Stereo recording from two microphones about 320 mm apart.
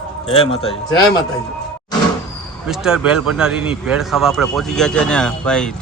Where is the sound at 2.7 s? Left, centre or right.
Centre.